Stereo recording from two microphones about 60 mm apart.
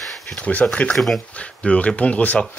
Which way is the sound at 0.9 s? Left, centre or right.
Centre.